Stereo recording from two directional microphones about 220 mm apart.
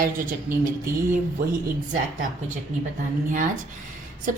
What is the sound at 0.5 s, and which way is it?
Speech, 40° right (ahead or behind).